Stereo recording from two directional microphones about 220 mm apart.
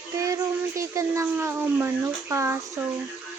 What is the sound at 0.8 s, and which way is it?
Speech, 15° right (ahead or behind).